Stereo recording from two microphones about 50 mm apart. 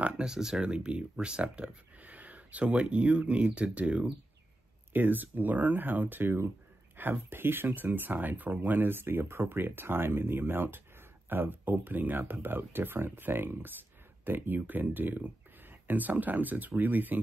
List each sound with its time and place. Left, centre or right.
0.2 s speech: centre
4.9 s speech: right